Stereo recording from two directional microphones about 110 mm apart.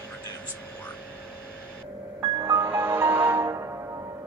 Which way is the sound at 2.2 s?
35° right (ahead or behind).